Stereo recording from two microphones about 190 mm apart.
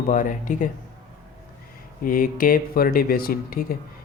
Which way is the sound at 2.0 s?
45° left (ahead or behind).